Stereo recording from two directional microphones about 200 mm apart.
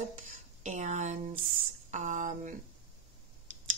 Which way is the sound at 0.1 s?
40° right (ahead or behind).